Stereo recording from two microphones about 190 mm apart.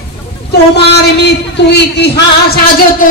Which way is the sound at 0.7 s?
60° left (ahead or behind).